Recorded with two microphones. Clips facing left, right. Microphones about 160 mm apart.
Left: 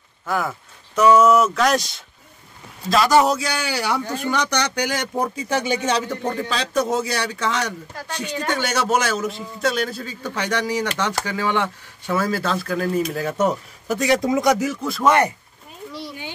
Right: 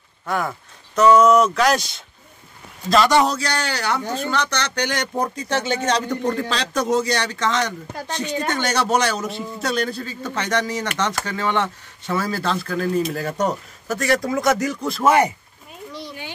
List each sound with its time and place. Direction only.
0.3 s a man's voice: centre (ahead or behind)
13.8 s speech: 20° left (ahead or behind)
14.6 s a man's voice: 5° left (ahead or behind)